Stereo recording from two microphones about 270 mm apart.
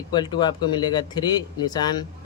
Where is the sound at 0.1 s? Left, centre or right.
Centre.